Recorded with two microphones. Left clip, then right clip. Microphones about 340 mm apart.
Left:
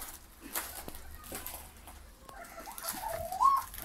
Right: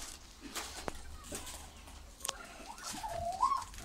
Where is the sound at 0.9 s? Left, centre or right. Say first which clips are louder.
Right 6 dB; right.